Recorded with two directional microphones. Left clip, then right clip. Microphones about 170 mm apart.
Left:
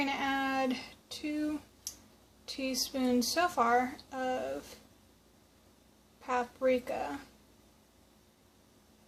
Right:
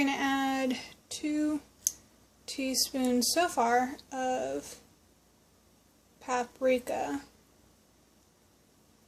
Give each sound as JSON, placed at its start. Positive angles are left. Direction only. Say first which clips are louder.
{"t": 0.0, "sound": "a sound", "louder": "right 3 dB", "side_deg": -40}
{"t": 2.5, "sound": "a woman's voice", "louder": "right 3 dB", "side_deg": -40}
{"t": 6.2, "sound": "a woman's voice", "louder": "right 2 dB", "side_deg": -40}